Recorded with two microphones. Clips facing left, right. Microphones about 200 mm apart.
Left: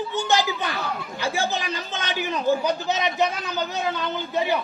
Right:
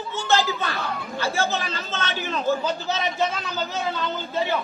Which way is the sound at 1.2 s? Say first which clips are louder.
Right 1 dB; 15° left (ahead or behind).